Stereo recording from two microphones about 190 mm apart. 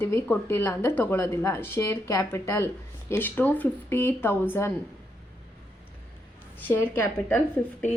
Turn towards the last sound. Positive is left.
turn(degrees=10)  # may be behind; listen again after turning